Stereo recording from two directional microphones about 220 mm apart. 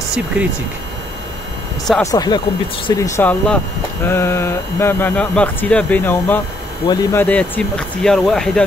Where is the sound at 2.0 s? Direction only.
15° left (ahead or behind).